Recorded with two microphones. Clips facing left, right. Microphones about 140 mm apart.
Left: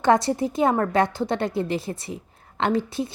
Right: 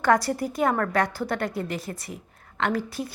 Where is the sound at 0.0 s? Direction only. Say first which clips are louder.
Left 3 dB; 25° left (ahead or behind).